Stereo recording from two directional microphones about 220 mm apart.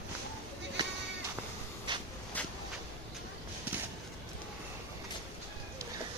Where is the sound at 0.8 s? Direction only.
20° right (ahead or behind).